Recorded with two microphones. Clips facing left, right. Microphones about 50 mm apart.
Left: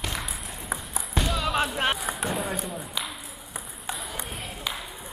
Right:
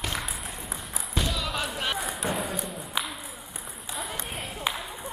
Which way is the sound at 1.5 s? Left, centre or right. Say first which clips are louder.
Left 5 dB; left.